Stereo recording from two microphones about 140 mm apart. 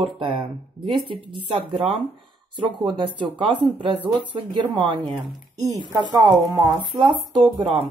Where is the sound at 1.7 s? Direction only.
35° right (ahead or behind).